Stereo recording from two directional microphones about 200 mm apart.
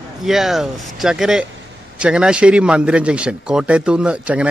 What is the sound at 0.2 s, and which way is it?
A man's voice, centre (ahead or behind).